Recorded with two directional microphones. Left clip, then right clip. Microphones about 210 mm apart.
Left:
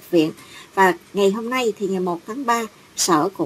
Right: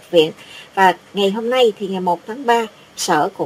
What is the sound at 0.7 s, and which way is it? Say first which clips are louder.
Speech: right 3 dB; 25° left (ahead or behind).